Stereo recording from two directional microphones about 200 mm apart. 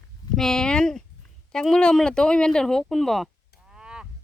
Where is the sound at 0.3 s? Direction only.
5° left (ahead or behind).